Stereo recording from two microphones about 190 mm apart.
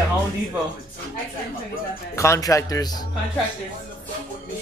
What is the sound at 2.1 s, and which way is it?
Speech, 15° left (ahead or behind).